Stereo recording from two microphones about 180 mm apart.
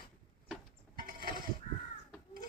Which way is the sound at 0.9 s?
55° right (ahead or behind).